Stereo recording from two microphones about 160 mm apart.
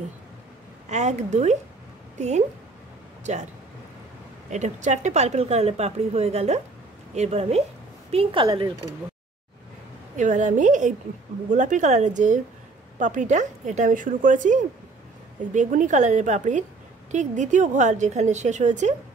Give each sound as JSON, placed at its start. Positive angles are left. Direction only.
{"t": 0.8, "sound": "a woman's voice", "side_deg": -45}
{"t": 4.5, "sound": "a woman's voice", "side_deg": -50}
{"t": 10.1, "sound": "a woman's voice", "side_deg": -50}